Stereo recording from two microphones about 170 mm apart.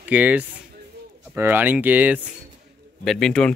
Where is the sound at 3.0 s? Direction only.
5° left (ahead or behind).